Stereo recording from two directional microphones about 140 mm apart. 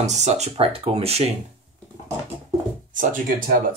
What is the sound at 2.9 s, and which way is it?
Music, 75° right (ahead or behind).